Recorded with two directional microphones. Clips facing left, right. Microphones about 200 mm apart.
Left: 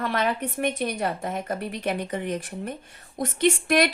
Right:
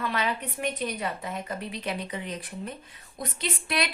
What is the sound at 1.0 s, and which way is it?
Speech, 45° left (ahead or behind).